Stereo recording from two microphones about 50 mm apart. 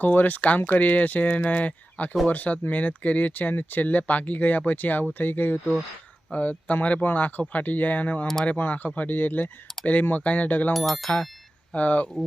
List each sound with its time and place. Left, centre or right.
0.0 s speech: left
10.8 s speech: centre
11.7 s speech: left